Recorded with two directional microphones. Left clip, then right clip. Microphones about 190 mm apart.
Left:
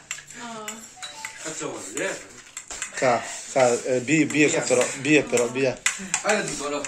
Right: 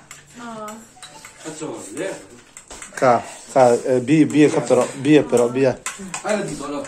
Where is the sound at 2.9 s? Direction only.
20° right (ahead or behind).